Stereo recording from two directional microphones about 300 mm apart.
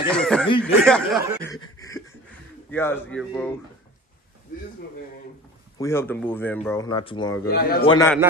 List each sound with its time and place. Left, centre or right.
0.1 s speech: centre
1.8 s a sound: centre
2.7 s speech: centre
5.8 s speech: centre
7.4 s a man's voice: left
7.8 s speech: centre